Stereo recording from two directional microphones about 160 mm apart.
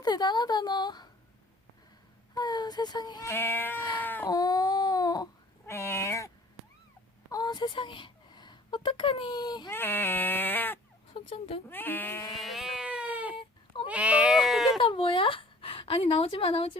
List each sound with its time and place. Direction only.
0.0 s child singing: 25° left (ahead or behind)
2.3 s child singing: 25° left (ahead or behind)
4.0 s speech: 10° left (ahead or behind)
4.3 s baby cry: 25° left (ahead or behind)
7.3 s a woman's voice: 25° left (ahead or behind)
9.6 s speech: 15° left (ahead or behind)
11.1 s speech: 35° left (ahead or behind)
11.7 s speech: 10° left (ahead or behind)
12.3 s cat: centre (ahead or behind)
13.8 s bleat: 10° right (ahead or behind)
14.8 s speech: 35° left (ahead or behind)